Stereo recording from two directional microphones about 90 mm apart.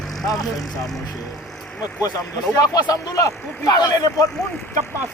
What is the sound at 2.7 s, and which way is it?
Speech, 50° left (ahead or behind).